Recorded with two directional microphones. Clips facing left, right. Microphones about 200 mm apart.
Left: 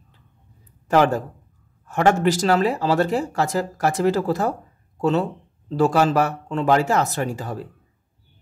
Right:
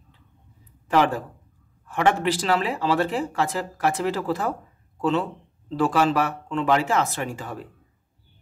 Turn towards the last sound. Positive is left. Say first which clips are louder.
# left 4 dB
turn(degrees=40)  # may be behind; listen again after turning